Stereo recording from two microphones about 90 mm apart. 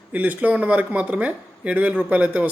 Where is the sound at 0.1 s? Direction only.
15° right (ahead or behind).